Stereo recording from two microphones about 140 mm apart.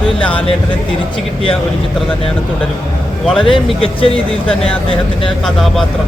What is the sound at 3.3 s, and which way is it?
Speech, 40° left (ahead or behind).